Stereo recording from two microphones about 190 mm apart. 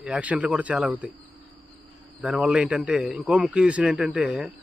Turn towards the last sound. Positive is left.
turn(degrees=-5)  # may be behind; listen again after turning